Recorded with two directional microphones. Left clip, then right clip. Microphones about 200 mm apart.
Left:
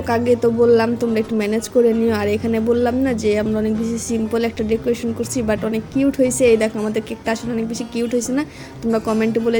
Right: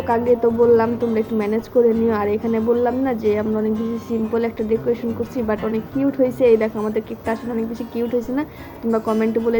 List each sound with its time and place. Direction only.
0.1 s a woman's voice: 25° left (ahead or behind)